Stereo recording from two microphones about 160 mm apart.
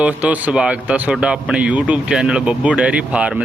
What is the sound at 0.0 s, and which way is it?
Speech, 10° right (ahead or behind).